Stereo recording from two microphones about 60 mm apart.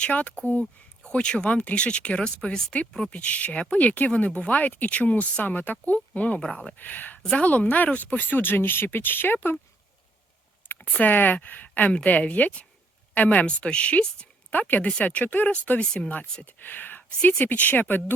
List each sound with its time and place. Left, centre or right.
0.0 s speech: left
3.1 s speech: left
10.8 s a sound: left
11.1 s speech: left